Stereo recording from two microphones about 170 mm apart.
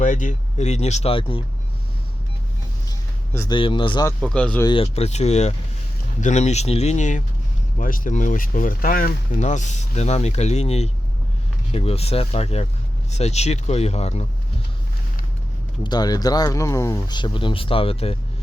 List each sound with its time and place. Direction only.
0.0 s speech: 50° left (ahead or behind); by 1.5 s 30° left (ahead or behind)
3.5 s speech: 30° left (ahead or behind)
4.2 s speech: 5° left (ahead or behind)
4.6 s speech: 30° left (ahead or behind)
15.8 s speech: 25° left (ahead or behind)